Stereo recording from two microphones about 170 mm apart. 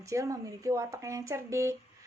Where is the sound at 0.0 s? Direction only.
20° right (ahead or behind).